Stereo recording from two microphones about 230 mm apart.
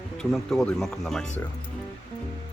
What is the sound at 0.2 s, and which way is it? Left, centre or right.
Speech, centre.